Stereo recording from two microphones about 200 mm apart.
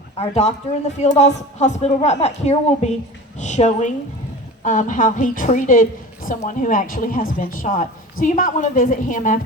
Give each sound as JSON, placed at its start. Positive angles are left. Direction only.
{"t": 0.2, "sound": "a woman's voice", "side_deg": 30}